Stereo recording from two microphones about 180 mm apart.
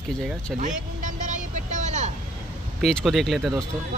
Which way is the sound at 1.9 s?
40° right (ahead or behind).